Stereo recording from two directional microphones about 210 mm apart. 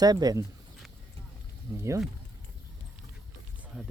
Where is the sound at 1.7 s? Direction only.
15° right (ahead or behind).